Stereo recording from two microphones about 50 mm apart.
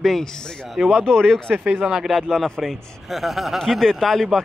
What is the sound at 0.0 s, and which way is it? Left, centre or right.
Speech, centre.